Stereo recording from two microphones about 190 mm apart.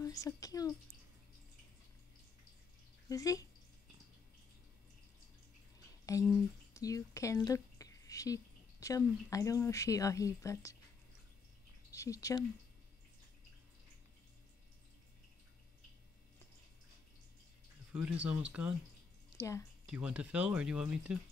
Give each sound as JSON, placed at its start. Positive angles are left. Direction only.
{"t": 0.0, "sound": "speech", "side_deg": 20}
{"t": 3.1, "sound": "speech", "side_deg": 15}
{"t": 6.1, "sound": "a woman's voice", "side_deg": 15}
{"t": 11.9, "sound": "speech", "side_deg": 15}
{"t": 17.9, "sound": "speech", "side_deg": -5}
{"t": 19.3, "sound": "a woman's voice", "side_deg": 15}
{"t": 19.9, "sound": "speech", "side_deg": -5}